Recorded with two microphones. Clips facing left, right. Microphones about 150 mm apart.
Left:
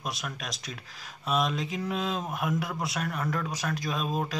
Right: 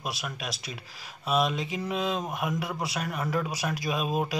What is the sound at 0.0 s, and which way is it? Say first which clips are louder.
Speech: right 1 dB; 5° right (ahead or behind).